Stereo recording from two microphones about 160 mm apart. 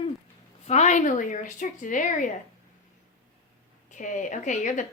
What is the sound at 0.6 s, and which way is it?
Speech, 45° left (ahead or behind).